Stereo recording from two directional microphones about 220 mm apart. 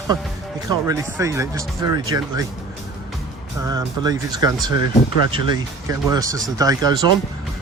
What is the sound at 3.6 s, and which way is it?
Speech, 15° right (ahead or behind).